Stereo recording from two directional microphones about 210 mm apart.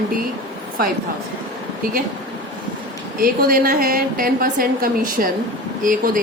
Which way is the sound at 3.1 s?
45° right (ahead or behind).